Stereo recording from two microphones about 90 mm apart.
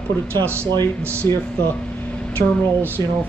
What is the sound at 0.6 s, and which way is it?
Speech, 25° left (ahead or behind).